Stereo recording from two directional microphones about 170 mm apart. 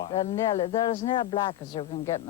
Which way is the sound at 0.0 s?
30° left (ahead or behind).